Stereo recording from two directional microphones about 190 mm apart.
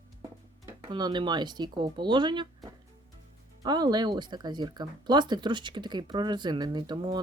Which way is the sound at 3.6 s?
20° right (ahead or behind).